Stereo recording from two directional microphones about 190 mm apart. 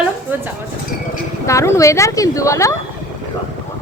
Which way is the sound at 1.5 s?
15° left (ahead or behind).